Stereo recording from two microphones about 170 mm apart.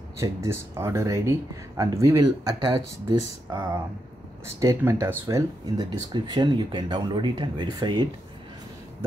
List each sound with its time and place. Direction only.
0.2 s speech: 15° right (ahead or behind)